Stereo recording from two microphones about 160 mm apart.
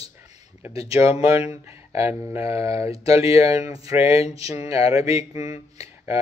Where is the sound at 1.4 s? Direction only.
40° left (ahead or behind).